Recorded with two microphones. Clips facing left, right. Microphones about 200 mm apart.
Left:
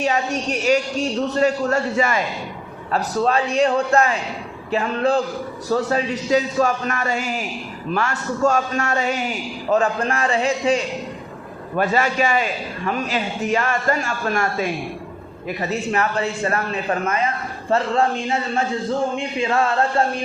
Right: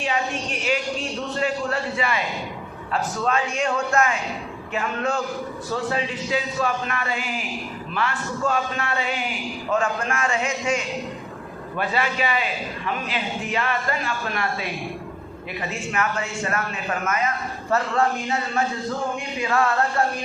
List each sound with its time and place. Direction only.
0.6 s a man's voice: 40° left (ahead or behind)
11.8 s a man's voice: 45° left (ahead or behind)
15.7 s a man's voice: 35° left (ahead or behind)